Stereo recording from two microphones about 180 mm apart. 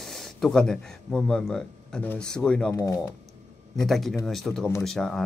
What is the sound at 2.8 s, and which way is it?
Speech, 15° left (ahead or behind).